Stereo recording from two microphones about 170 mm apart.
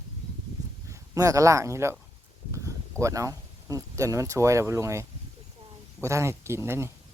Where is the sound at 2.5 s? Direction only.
20° right (ahead or behind).